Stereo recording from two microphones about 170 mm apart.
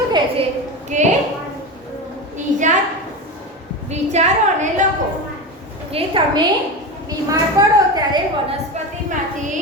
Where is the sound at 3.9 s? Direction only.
40° right (ahead or behind).